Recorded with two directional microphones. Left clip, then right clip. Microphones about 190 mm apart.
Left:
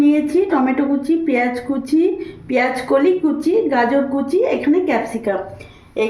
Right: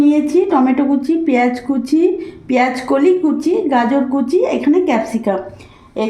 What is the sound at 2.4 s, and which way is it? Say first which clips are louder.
Speech: right 2 dB; 50° right (ahead or behind).